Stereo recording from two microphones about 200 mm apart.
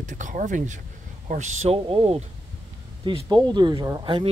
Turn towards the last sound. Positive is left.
turn(degrees=-20)  # may be behind; listen again after turning